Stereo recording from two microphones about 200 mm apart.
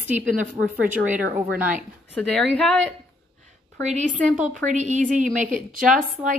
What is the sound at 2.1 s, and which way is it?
Speech, centre (ahead or behind).